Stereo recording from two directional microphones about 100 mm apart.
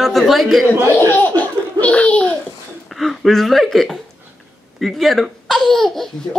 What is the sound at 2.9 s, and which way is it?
Speech, centre (ahead or behind).